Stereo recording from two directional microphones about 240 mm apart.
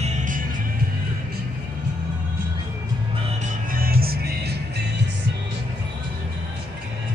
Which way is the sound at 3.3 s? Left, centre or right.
Right.